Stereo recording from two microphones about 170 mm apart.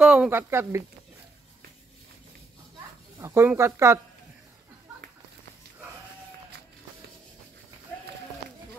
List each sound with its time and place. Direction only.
0.0 s speech: 5° right (ahead or behind)
3.2 s speech: 15° right (ahead or behind)